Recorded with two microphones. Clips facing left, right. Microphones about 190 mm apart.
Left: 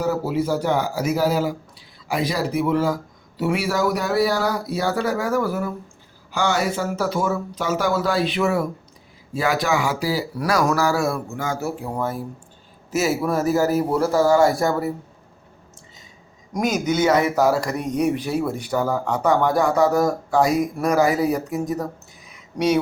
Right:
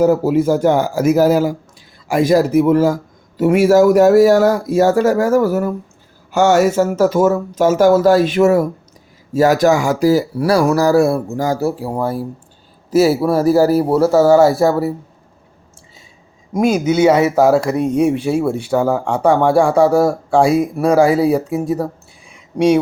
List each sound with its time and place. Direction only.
0.0 s a man's voice: 50° right (ahead or behind)
10.3 s a man's voice: 30° right (ahead or behind)
16.7 s a man's voice: 10° right (ahead or behind)
18.4 s speech: 30° right (ahead or behind)